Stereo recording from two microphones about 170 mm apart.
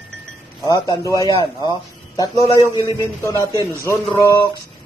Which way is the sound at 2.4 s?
20° left (ahead or behind).